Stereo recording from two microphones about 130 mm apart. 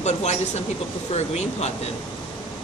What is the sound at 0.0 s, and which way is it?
Speech, 60° left (ahead or behind).